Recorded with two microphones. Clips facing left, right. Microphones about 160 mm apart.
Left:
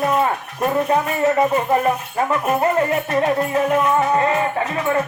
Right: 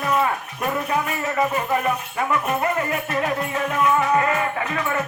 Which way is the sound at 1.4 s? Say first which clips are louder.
Left 5 dB; 30° left (ahead or behind).